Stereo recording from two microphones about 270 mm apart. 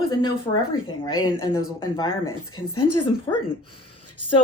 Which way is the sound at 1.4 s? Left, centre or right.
Centre.